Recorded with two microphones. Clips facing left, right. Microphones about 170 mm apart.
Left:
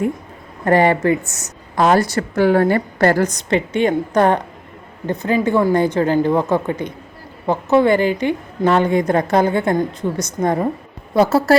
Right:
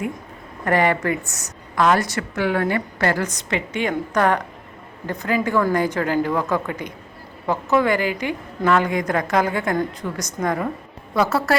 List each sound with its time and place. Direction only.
0.6 s a woman's voice: 30° left (ahead or behind)